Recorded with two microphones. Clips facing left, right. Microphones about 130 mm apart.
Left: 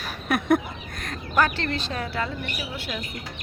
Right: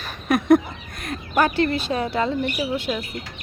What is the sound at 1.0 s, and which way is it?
Speech, 15° right (ahead or behind).